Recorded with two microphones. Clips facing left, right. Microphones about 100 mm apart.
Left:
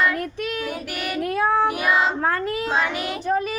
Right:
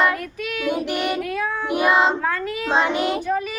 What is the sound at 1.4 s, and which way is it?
Child singing, 35° left (ahead or behind).